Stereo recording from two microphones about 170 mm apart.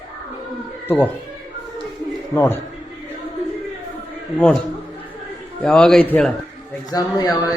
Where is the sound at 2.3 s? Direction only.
15° left (ahead or behind).